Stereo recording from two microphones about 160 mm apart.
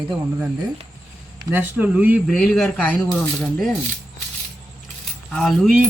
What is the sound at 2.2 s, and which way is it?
Speech, centre (ahead or behind).